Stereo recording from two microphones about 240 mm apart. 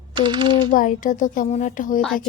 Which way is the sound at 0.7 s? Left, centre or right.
Left.